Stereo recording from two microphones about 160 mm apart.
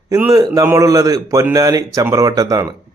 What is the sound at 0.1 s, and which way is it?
Speech, 20° right (ahead or behind).